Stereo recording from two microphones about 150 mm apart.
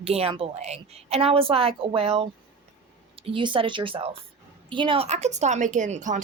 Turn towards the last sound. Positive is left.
turn(degrees=-55)  # may be behind; listen again after turning